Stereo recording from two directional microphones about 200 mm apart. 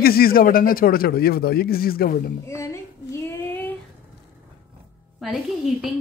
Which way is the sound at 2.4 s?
15° left (ahead or behind).